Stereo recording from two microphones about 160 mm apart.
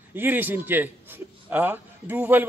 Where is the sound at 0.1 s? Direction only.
10° right (ahead or behind).